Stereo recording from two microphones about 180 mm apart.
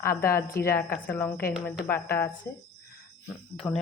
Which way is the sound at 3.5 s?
Centre (ahead or behind).